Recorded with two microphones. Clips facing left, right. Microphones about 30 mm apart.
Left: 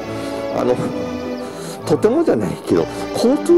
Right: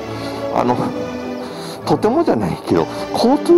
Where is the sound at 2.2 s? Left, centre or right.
Right.